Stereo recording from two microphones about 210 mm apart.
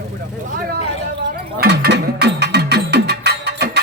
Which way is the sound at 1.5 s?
50° right (ahead or behind).